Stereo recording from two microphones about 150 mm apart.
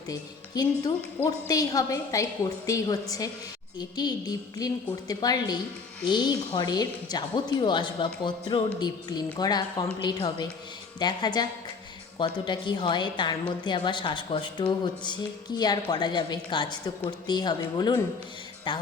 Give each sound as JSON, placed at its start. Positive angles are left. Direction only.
{"t": 0.1, "sound": "a woman's voice", "side_deg": 25}